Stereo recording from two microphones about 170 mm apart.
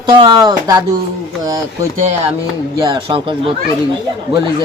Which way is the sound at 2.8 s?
30° right (ahead or behind).